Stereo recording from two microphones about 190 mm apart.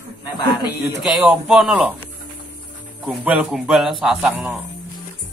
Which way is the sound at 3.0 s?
5° right (ahead or behind).